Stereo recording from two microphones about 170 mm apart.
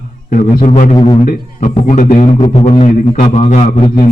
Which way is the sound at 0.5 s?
45° left (ahead or behind).